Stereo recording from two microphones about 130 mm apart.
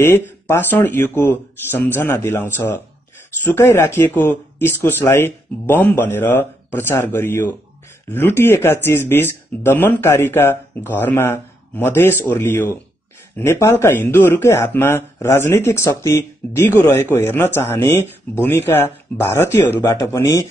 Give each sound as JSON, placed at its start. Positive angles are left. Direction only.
{"t": 0.5, "sound": "speech", "side_deg": 15}